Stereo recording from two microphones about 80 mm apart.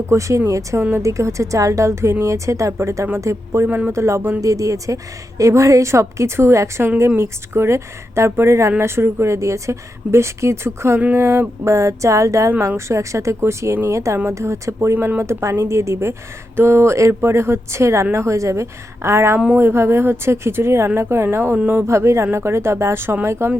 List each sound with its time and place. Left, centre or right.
0.1 s a woman's voice: right
3.7 s speech: right
3.9 s a woman's voice: right
14.9 s speech: right
15.2 s a woman's voice: right